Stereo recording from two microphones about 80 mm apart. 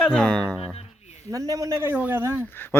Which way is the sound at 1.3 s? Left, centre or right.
Right.